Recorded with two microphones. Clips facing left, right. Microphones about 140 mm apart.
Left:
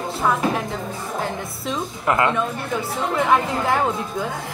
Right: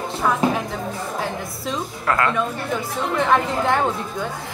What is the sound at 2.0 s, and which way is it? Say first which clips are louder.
Speech: left 2 dB; 20° left (ahead or behind).